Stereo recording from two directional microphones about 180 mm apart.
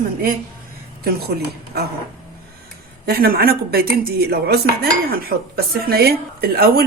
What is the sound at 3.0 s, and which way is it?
Speech, 55° right (ahead or behind).